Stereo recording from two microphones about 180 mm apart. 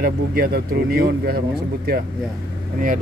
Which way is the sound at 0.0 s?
55° right (ahead or behind).